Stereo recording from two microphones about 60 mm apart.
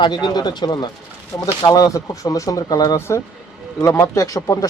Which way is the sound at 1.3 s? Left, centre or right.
Left.